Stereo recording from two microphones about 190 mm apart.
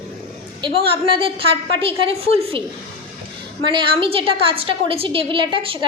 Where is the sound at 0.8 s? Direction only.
30° right (ahead or behind).